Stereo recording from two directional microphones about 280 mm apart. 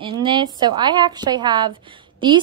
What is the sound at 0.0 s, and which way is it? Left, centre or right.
A woman's voice, centre.